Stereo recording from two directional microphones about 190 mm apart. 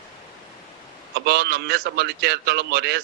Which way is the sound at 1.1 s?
60° right (ahead or behind).